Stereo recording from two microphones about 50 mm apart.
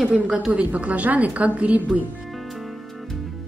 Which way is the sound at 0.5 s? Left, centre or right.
Right.